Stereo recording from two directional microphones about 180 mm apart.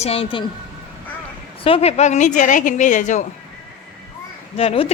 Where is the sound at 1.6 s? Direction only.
35° left (ahead or behind).